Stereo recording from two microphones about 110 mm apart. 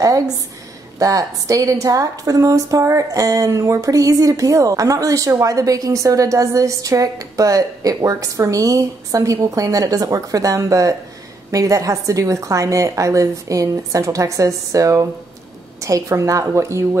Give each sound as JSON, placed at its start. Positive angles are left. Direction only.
{"t": 0.9, "sound": "a woman's voice", "side_deg": -30}